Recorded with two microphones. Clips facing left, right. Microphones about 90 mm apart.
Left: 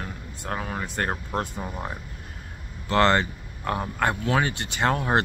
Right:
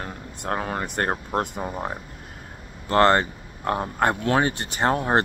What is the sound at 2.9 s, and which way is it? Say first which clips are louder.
Speech: right 3 dB; 40° right (ahead or behind).